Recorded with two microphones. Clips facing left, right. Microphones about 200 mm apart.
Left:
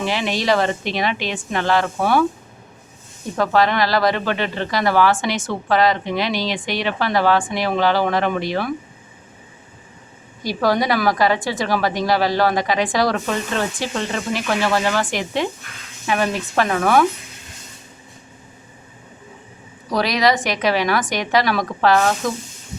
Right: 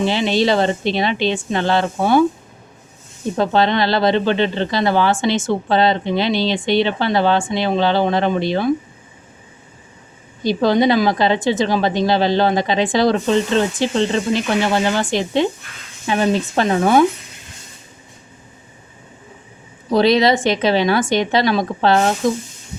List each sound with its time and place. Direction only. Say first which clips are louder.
0.0 s speech: right 5 dB; 25° right (ahead or behind)
3.3 s speech: right 1 dB; 25° right (ahead or behind)
10.4 s speech: right 4 dB; 25° right (ahead or behind)
19.9 s speech: right 5 dB; 25° right (ahead or behind)